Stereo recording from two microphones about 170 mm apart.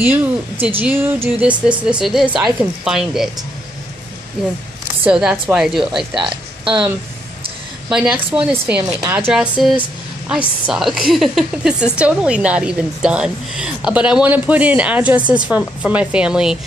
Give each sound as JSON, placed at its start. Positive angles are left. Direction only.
{"t": 0.0, "sound": "a woman's voice", "side_deg": -10}
{"t": 5.0, "sound": "a woman's voice", "side_deg": -10}
{"t": 6.1, "sound": "speech", "side_deg": -30}
{"t": 7.9, "sound": "a woman's voice", "side_deg": -5}